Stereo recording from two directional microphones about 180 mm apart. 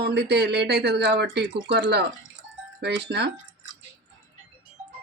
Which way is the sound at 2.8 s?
70° right (ahead or behind).